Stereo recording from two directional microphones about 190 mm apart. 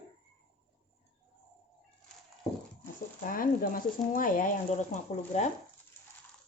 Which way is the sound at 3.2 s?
50° left (ahead or behind).